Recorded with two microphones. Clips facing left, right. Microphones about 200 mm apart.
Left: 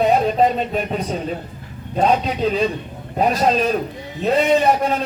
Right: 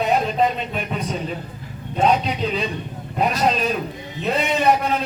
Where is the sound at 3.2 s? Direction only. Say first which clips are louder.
Left 3 dB; 40° left (ahead or behind).